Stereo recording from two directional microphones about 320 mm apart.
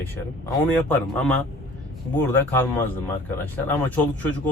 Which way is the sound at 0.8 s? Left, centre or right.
Centre.